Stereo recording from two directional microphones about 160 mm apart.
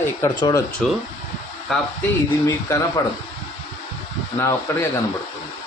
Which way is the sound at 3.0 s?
20° left (ahead or behind).